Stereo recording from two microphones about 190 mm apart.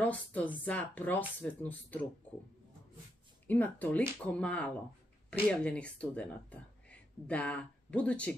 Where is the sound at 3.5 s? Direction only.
10° left (ahead or behind).